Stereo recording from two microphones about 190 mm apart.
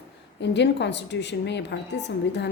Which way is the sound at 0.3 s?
65° left (ahead or behind).